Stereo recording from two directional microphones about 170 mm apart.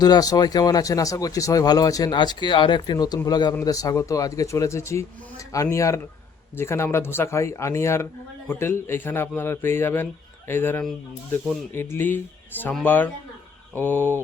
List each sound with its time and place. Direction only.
0.0 s speech: 20° left (ahead or behind)